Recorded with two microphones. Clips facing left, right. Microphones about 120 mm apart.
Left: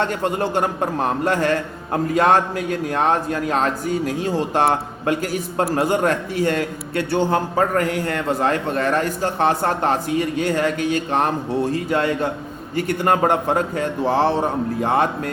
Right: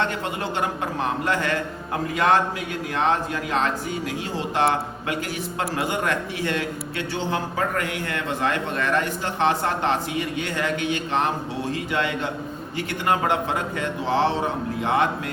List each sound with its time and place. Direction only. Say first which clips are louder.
0.1 s a man's voice: left 6 dB; 45° left (ahead or behind)